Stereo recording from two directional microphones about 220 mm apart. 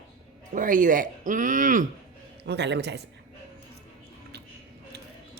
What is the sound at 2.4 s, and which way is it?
Speech, 50° right (ahead or behind).